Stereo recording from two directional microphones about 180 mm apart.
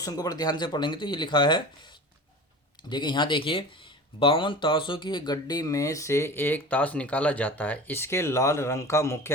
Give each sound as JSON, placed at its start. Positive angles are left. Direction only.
{"t": 0.0, "sound": "speech", "side_deg": 20}
{"t": 2.9, "sound": "speech", "side_deg": 25}